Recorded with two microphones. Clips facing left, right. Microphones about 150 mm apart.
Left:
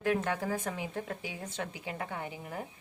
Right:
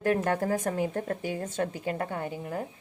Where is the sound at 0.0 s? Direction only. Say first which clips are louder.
Right 5 dB; 45° right (ahead or behind).